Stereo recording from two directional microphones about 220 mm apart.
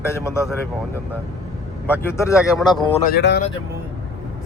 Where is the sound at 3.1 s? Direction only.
50° left (ahead or behind).